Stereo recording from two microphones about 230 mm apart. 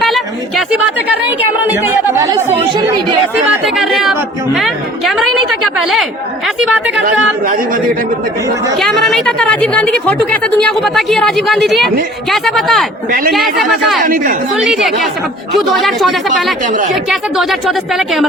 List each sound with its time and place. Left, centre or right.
0.0 s chatter: centre
2.1 s a woman's voice: centre
3.8 s a woman's voice: centre
7.4 s speech: right
8.8 s a woman's voice: centre
13.1 s speech: right
13.3 s a woman's voice: centre
14.0 s speech: right
14.5 s a woman's voice: centre